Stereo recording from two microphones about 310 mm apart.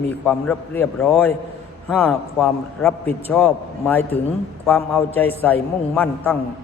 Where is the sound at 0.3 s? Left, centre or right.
Centre.